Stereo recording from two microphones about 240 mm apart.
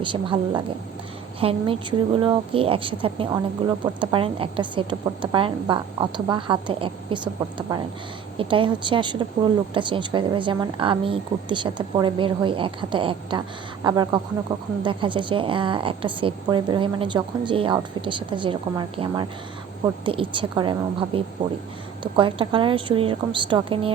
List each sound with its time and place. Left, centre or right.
0.0 s speech: right
8.4 s a woman's voice: right